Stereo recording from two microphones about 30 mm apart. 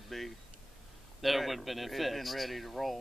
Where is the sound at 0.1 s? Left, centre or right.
Centre.